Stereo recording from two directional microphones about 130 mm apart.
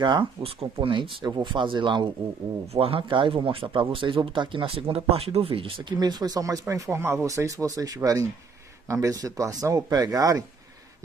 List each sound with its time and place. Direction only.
0.0 s speech: 35° right (ahead or behind)